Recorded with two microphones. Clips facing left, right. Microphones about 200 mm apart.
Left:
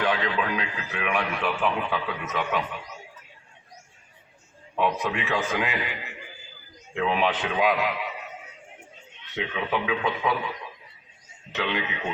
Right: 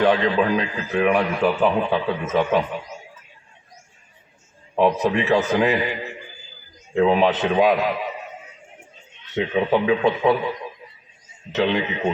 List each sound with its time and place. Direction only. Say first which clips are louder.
0.0 s a man's voice: right 8 dB; 45° right (ahead or behind)
4.7 s a man's voice: right 7 dB; 35° right (ahead or behind)
6.9 s a man's voice: right 8 dB; 40° right (ahead or behind)
9.3 s a man's voice: right 9 dB; 40° right (ahead or behind)
11.5 s a man's voice: right 8 dB; 40° right (ahead or behind)